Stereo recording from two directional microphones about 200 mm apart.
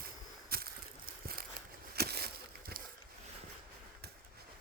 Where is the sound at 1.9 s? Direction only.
50° right (ahead or behind).